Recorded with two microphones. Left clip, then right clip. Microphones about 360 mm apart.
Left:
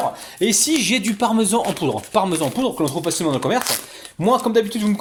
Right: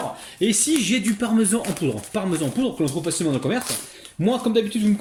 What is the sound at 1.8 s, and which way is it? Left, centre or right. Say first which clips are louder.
Speech: left 6 dB; left.